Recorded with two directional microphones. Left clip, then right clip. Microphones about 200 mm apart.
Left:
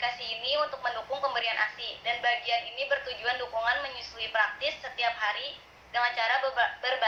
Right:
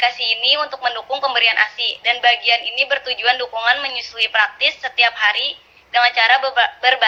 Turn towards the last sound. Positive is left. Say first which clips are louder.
# right 12 dB
turn(degrees=-40)  # may be behind; listen again after turning